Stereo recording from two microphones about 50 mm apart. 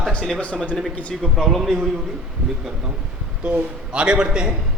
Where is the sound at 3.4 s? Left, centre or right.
Right.